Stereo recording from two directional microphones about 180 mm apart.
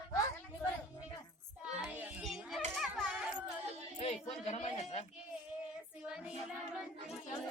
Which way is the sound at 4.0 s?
35° left (ahead or behind).